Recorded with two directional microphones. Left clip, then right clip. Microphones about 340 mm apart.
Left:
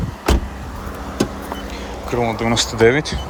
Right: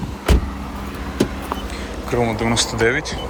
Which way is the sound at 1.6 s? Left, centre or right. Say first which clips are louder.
Even; centre.